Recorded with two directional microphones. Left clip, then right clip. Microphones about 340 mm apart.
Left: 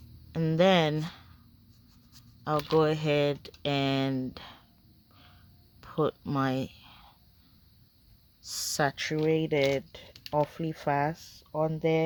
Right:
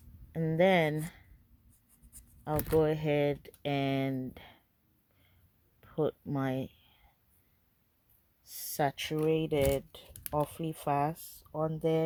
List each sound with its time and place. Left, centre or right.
0.3 s speech: centre
2.4 s speech: centre
5.8 s a sound: centre
8.4 s speech: centre